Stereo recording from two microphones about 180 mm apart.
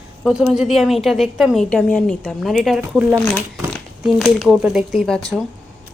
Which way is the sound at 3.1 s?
10° left (ahead or behind).